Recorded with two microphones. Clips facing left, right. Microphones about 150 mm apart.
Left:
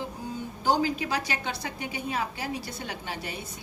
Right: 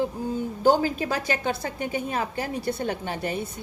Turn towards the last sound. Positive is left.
turn(degrees=-50)  # may be behind; listen again after turning